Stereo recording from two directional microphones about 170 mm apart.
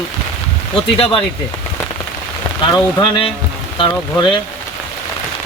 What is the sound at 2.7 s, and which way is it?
Speech, 30° left (ahead or behind).